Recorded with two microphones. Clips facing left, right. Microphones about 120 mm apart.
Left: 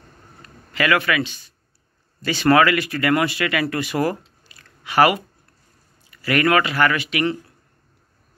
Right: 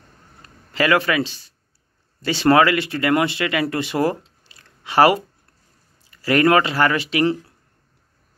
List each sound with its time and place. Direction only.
0.7 s speech: 30° right (ahead or behind)